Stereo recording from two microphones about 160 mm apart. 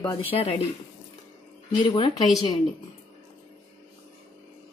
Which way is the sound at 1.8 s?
35° left (ahead or behind).